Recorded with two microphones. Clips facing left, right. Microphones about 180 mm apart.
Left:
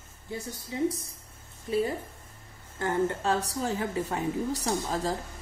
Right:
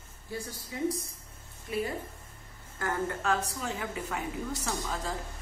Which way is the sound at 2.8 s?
25° left (ahead or behind).